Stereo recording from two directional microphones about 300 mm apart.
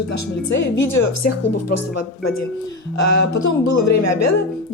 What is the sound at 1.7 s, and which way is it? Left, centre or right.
A woman's voice, left.